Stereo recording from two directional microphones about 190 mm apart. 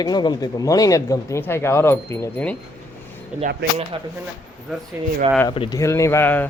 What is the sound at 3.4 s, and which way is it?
Speech, 55° right (ahead or behind).